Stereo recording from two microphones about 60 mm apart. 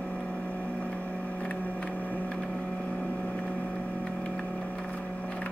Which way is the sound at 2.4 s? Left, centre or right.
Centre.